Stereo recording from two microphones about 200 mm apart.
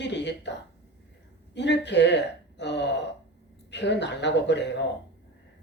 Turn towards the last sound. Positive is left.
turn(degrees=60)  # may be behind; listen again after turning